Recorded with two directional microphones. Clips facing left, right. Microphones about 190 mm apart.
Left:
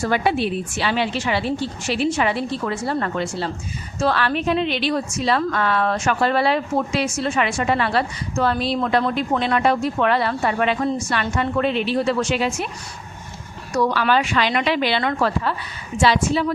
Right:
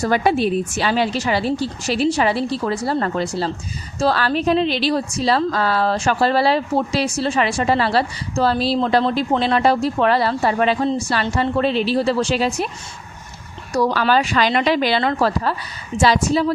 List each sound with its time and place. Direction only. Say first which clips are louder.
0.0 s a woman's voice: right 3 dB; 40° right (ahead or behind)
13.7 s a woman's voice: right 2 dB; 35° right (ahead or behind)